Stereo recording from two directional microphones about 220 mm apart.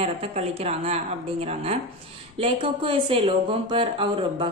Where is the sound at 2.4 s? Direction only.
25° right (ahead or behind).